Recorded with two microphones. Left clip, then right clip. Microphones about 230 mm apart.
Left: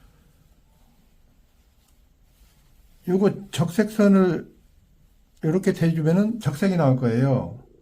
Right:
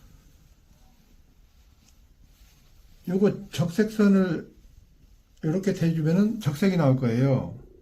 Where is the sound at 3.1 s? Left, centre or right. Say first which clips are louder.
Left 3 dB; left.